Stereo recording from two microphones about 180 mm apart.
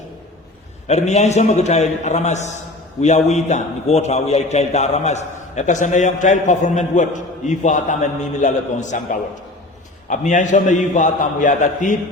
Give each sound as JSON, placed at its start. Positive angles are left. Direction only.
{"t": 0.9, "sound": "a man's voice", "side_deg": 40}